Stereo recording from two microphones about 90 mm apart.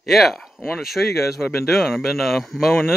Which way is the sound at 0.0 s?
Centre (ahead or behind).